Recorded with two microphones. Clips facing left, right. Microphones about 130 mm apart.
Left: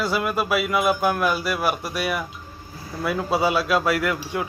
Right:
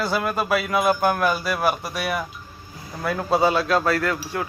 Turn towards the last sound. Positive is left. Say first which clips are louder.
# even
turn(degrees=10)  # may be behind; listen again after turning